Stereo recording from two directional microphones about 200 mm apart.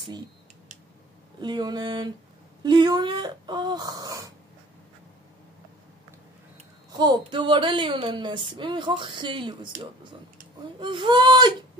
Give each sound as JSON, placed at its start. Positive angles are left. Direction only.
{"t": 1.4, "sound": "a woman's voice", "side_deg": -20}
{"t": 6.9, "sound": "a woman's voice", "side_deg": -20}
{"t": 10.8, "sound": "a woman's voice", "side_deg": -25}